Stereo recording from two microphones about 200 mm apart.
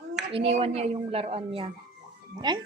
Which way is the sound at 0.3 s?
30° right (ahead or behind).